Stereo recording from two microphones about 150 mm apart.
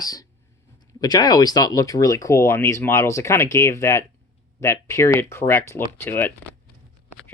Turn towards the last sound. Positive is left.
turn(degrees=15)  # may be behind; listen again after turning